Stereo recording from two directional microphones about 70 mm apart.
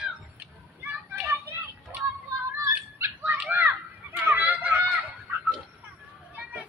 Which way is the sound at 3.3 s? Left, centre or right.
Right.